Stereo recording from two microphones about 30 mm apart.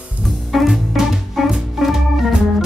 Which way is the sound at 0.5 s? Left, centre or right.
Centre.